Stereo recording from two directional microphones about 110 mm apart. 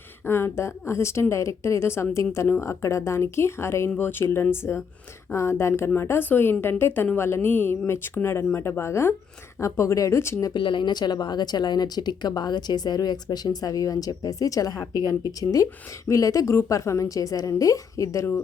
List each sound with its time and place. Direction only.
0.3 s speech: 20° left (ahead or behind)
10.5 s speech: 45° left (ahead or behind); by 18.3 s 30° left (ahead or behind)